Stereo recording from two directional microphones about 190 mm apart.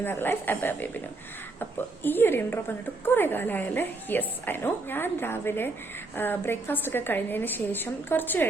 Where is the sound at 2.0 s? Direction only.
10° left (ahead or behind).